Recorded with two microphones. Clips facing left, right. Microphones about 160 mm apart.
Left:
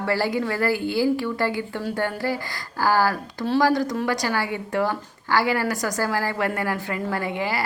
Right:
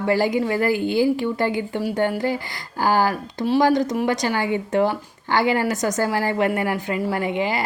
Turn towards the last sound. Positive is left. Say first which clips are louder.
# right 3 dB
turn(degrees=-20)  # may be behind; listen again after turning